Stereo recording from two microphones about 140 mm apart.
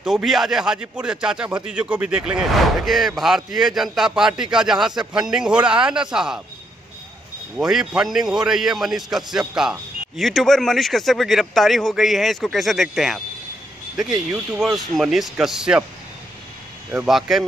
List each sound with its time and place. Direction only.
0.0 s a man's voice: centre (ahead or behind)
7.5 s a man's voice: 5° right (ahead or behind)
14.5 s a man's voice: centre (ahead or behind)
16.9 s a man's voice: 5° right (ahead or behind)